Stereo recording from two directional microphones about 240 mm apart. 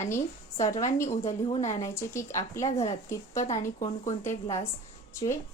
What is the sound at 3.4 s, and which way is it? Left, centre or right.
Speech, left.